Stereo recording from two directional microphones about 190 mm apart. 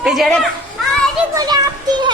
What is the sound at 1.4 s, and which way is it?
Music, 20° right (ahead or behind).